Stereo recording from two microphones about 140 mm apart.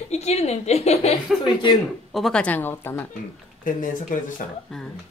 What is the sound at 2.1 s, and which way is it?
Speech, 5° left (ahead or behind).